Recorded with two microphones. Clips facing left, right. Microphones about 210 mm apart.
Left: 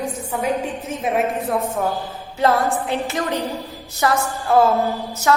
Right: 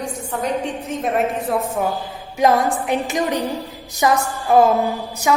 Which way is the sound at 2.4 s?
15° right (ahead or behind).